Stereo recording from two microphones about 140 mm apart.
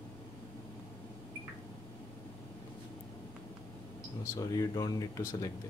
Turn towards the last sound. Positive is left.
turn(degrees=25)  # may be behind; listen again after turning